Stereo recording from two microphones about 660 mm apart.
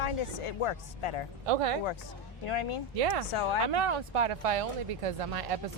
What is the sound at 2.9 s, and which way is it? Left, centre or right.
Speech, right.